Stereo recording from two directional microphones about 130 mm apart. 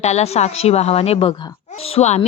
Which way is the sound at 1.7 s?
50° left (ahead or behind).